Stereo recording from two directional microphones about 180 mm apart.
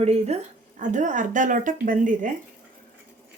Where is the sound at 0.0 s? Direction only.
35° right (ahead or behind).